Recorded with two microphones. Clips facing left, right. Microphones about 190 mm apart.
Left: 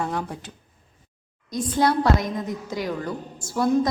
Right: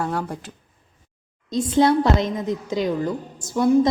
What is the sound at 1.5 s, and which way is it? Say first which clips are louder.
A woman's voice: right 4 dB; 25° right (ahead or behind).